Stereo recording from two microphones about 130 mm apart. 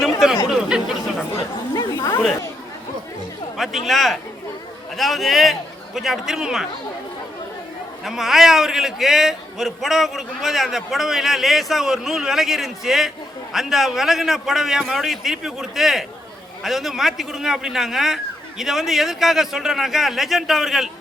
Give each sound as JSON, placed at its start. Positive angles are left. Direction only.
{"t": 0.5, "sound": "a man's voice", "side_deg": -5}
{"t": 1.4, "sound": "chatter", "side_deg": 30}
{"t": 3.6, "sound": "a man's voice", "side_deg": 0}
{"t": 8.0, "sound": "a man's voice", "side_deg": 0}